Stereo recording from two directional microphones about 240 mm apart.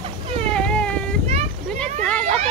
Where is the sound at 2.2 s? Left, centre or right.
Right.